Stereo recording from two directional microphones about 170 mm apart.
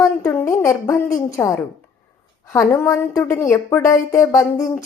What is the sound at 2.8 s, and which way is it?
A woman's voice, 20° left (ahead or behind).